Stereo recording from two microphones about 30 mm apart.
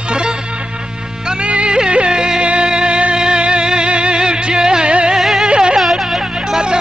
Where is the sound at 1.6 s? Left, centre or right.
Right.